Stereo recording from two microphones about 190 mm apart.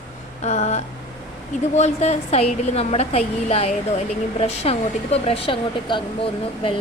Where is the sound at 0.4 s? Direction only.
35° left (ahead or behind).